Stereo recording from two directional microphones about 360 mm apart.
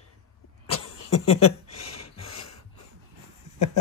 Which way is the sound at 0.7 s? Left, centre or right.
Left.